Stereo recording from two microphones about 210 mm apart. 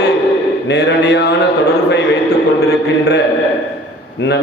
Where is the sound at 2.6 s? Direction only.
50° left (ahead or behind).